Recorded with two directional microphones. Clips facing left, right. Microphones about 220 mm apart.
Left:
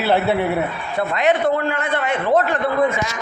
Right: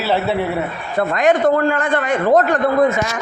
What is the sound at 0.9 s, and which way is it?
A man's voice, 45° right (ahead or behind).